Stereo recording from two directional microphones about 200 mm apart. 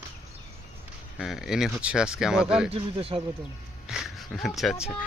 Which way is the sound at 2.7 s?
25° right (ahead or behind).